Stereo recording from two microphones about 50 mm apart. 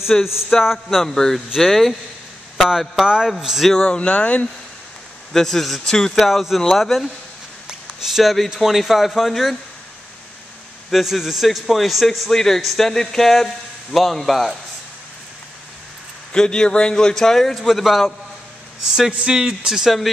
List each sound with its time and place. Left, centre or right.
0.1 s a man's voice: centre
3.8 s speech: left
5.3 s a man's voice: centre
6.2 s a man's voice: centre
10.9 s a man's voice: centre
16.3 s a man's voice: centre
18.9 s speech: centre